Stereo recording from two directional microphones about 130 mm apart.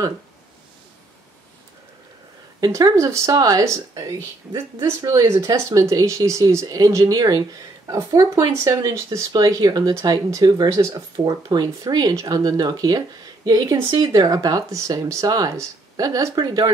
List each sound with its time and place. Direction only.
2.6 s speech: 25° right (ahead or behind)